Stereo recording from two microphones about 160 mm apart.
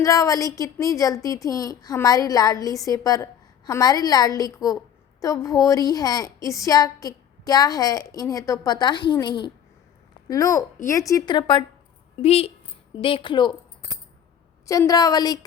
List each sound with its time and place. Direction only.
0.0 s a woman's voice: 20° left (ahead or behind)
14.7 s a woman's voice: 20° left (ahead or behind)